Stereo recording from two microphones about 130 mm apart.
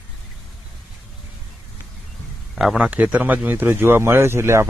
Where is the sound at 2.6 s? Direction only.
5° right (ahead or behind).